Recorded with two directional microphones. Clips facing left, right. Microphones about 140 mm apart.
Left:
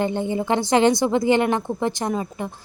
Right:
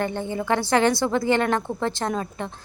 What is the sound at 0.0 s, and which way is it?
Speech, 15° left (ahead or behind).